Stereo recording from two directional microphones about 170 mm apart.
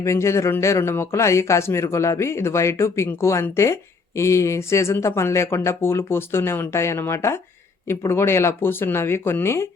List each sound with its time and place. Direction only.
0.0 s speech: 15° left (ahead or behind)